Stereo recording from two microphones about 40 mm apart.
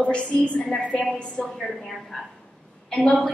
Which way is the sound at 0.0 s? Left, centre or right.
Left.